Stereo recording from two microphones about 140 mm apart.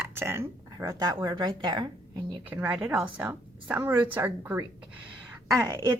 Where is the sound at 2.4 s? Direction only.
10° right (ahead or behind).